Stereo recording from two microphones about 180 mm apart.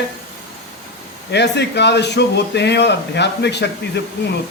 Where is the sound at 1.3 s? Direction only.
70° left (ahead or behind).